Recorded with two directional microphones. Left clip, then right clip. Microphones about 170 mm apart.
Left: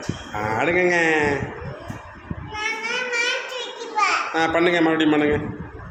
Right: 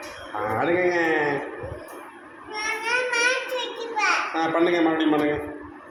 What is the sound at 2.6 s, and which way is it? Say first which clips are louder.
Child singing: even; 20° left (ahead or behind).